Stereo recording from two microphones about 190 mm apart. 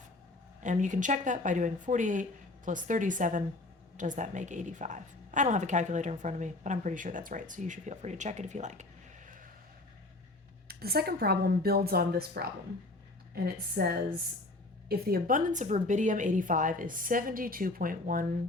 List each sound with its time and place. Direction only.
0.6 s a woman's voice: 40° right (ahead or behind)
10.7 s a woman's voice: 55° right (ahead or behind)